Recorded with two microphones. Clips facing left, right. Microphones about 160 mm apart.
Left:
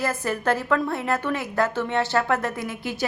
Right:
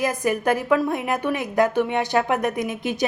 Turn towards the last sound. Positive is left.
turn(degrees=-20)  # may be behind; listen again after turning